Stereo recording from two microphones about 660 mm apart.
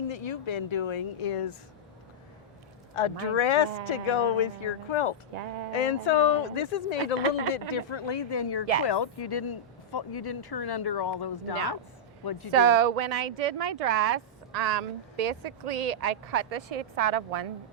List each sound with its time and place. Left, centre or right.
0.1 s speech: left
2.9 s speech: left
5.3 s speech: right
5.7 s speech: left
7.7 s speech: left
12.5 s speech: right